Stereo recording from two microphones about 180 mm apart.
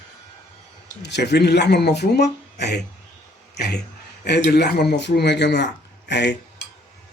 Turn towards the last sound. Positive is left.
turn(degrees=75)  # may be behind; listen again after turning